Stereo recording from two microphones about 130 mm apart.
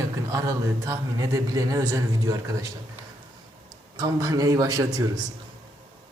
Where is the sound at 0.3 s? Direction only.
25° right (ahead or behind).